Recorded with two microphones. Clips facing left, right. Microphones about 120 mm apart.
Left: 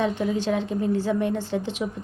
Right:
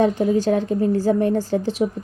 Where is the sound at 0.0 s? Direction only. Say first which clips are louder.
Right 6 dB; 40° right (ahead or behind).